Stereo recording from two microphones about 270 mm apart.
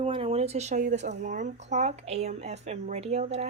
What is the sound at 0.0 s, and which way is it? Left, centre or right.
A woman's voice, right.